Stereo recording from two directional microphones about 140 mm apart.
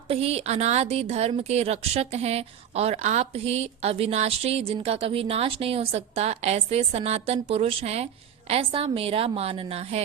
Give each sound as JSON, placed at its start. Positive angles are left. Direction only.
{"t": 0.1, "sound": "speech", "side_deg": -45}